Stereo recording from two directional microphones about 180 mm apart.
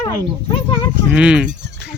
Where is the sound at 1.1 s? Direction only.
5° right (ahead or behind).